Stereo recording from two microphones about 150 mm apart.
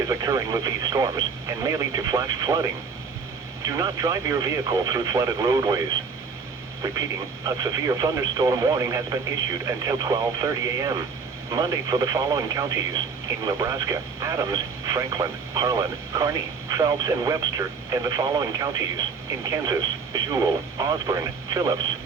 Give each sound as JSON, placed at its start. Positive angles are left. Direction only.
{"t": 0.0, "sound": "speech", "side_deg": -25}
{"t": 3.7, "sound": "speech", "side_deg": -25}
{"t": 7.4, "sound": "speech", "side_deg": -25}